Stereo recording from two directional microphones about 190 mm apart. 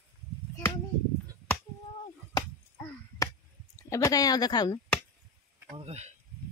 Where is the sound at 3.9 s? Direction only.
15° left (ahead or behind).